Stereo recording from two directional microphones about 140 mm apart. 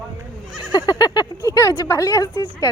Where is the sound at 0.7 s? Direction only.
30° left (ahead or behind).